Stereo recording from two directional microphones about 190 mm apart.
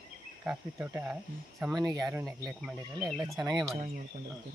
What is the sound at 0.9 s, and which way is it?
Speech, 10° right (ahead or behind).